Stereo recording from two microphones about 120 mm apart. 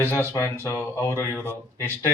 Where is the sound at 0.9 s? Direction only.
20° left (ahead or behind).